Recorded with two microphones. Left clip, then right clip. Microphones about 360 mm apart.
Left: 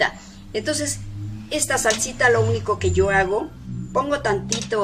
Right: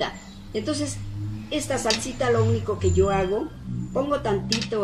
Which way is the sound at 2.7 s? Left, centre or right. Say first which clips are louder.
Left 3 dB; left.